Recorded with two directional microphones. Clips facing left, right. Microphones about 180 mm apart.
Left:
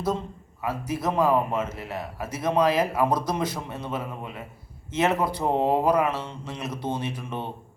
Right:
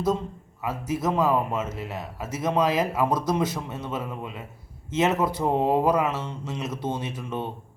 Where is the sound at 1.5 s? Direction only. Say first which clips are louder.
Left 1 dB; 20° right (ahead or behind).